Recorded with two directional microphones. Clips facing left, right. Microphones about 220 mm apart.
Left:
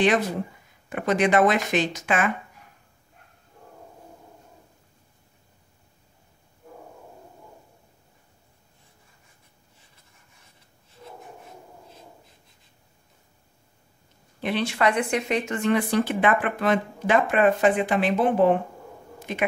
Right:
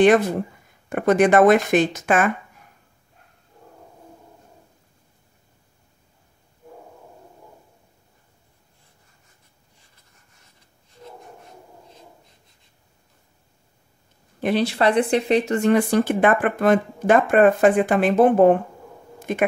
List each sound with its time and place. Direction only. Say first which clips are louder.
0.0 s speech: right 6 dB; 50° right (ahead or behind)
14.4 s speech: right 4 dB; 40° right (ahead or behind)